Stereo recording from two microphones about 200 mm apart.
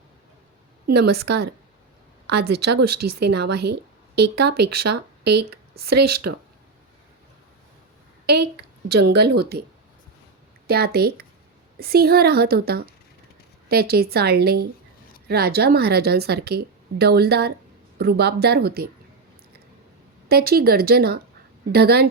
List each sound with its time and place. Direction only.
0.9 s a woman's voice: 55° right (ahead or behind)
8.9 s a woman's voice: 55° right (ahead or behind)
10.7 s a woman's voice: 50° right (ahead or behind)
20.2 s a woman's voice: 50° right (ahead or behind)